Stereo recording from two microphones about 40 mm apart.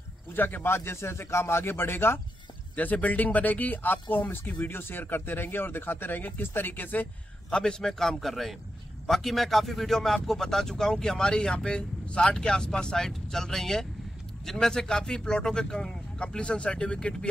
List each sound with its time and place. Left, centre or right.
0.3 s speech: left
2.7 s speech: left
7.5 s speech: centre
8.0 s speech: centre; by 13.0 s left
13.0 s speech: centre
16.2 s speech: left